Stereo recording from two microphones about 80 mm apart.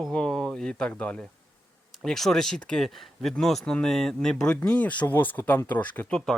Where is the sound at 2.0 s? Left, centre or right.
Centre; by 6.1 s left.